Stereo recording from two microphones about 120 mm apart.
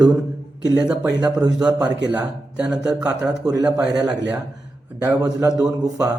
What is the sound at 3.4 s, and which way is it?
Speech, 30° right (ahead or behind).